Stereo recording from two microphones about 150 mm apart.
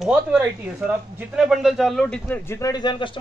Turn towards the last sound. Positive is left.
turn(degrees=30)  # may be behind; listen again after turning